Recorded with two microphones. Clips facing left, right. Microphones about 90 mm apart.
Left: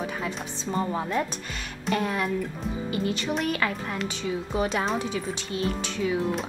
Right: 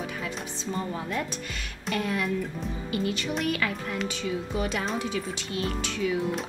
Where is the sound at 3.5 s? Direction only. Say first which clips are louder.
Left 1 dB; 35° left (ahead or behind).